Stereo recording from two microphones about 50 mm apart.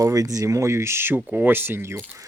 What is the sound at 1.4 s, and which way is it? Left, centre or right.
Speech, right.